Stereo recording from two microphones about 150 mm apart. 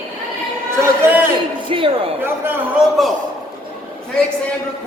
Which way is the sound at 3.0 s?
Centre (ahead or behind).